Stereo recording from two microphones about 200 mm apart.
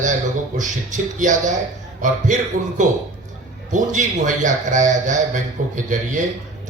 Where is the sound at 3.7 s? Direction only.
40° right (ahead or behind).